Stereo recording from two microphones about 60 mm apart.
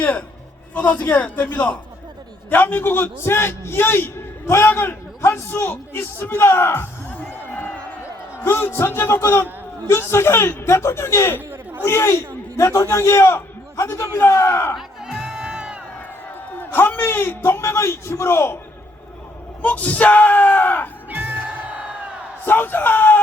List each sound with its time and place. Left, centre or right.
0.0 s a sound: left
0.7 s a man's voice: left
5.9 s music: left
8.4 s a man's voice: left
14.8 s music: centre
16.6 s a man's voice: left
19.6 s speech: left
21.1 s crowd: right
22.4 s speech: left